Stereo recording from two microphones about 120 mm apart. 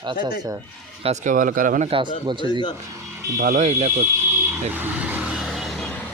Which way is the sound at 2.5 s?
40° left (ahead or behind).